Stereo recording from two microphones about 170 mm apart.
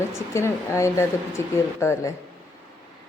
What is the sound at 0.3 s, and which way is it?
Speech, 15° left (ahead or behind).